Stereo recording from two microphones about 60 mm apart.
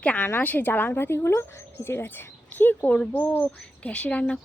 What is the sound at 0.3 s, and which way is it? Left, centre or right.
Speech, left.